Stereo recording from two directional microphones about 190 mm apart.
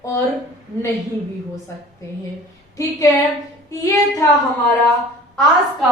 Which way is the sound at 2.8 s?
20° left (ahead or behind).